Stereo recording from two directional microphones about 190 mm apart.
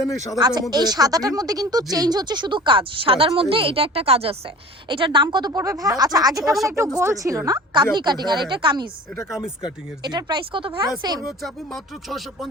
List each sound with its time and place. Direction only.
0.3 s speech: 20° right (ahead or behind)
6.4 s speech: centre (ahead or behind)
6.7 s speech: 15° right (ahead or behind)
10.0 s speech: 20° right (ahead or behind)
11.4 s speech: centre (ahead or behind)